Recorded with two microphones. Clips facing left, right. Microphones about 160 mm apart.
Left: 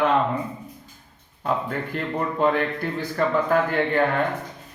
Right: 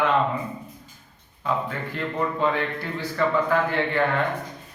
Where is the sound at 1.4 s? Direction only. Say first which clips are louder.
Left 1 dB; 45° left (ahead or behind).